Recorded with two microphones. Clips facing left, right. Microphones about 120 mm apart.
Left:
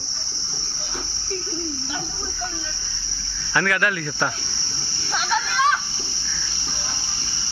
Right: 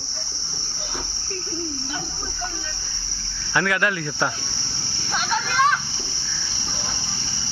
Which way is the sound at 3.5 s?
20° right (ahead or behind).